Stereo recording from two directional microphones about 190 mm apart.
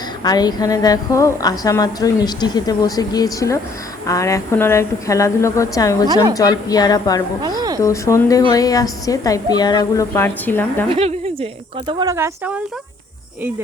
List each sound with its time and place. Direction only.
0.2 s a woman's voice: 20° left (ahead or behind)
7.4 s a sound: 20° right (ahead or behind)
7.8 s a woman's voice: 15° left (ahead or behind)
10.8 s speech: 30° right (ahead or behind)
12.1 s speech: 15° right (ahead or behind)